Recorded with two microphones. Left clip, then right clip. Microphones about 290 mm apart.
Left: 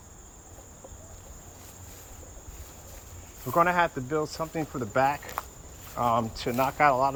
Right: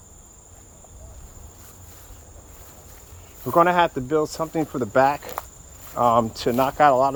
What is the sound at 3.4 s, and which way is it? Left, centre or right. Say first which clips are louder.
Speech: right 6 dB; right.